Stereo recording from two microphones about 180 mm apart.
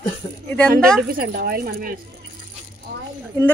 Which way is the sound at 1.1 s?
55° right (ahead or behind).